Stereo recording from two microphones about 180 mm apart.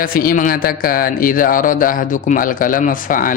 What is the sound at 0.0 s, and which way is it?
A man's voice, 55° left (ahead or behind).